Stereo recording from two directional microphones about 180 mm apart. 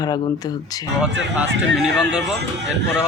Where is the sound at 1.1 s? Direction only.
80° right.